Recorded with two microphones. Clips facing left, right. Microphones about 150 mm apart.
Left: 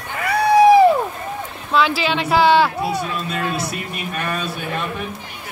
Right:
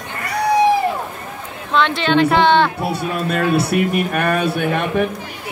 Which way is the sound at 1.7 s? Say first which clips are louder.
Right 2 dB; 5° left (ahead or behind).